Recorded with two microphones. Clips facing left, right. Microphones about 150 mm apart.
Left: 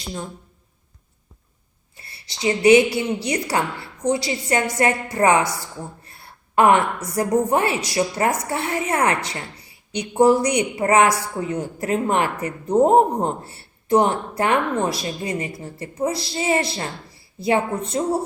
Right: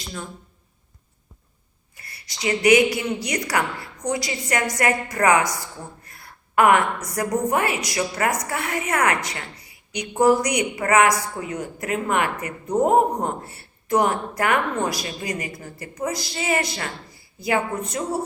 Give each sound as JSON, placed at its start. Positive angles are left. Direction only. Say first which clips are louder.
{"t": 2.0, "sound": "a woman's voice", "louder": "left 3 dB", "side_deg": 25}